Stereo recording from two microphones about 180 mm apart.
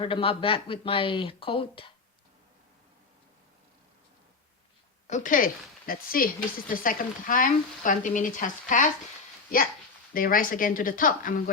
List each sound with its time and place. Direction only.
0.0 s speech: 30° left (ahead or behind)
5.0 s speech: 45° left (ahead or behind)
10.2 s speech: 50° left (ahead or behind)